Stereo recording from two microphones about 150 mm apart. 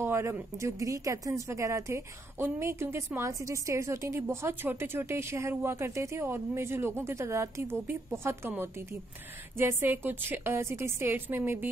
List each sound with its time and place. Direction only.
0.0 s speech: 15° right (ahead or behind)